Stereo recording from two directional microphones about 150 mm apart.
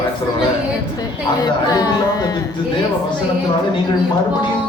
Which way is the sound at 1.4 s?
25° left (ahead or behind).